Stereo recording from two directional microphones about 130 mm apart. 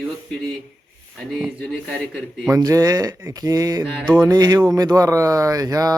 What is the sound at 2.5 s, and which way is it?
Speech, 25° right (ahead or behind).